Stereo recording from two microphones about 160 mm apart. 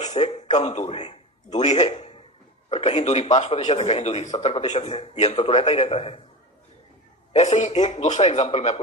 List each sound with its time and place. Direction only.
0.0 s a man's voice: 45° left (ahead or behind)
7.3 s a man's voice: 45° left (ahead or behind)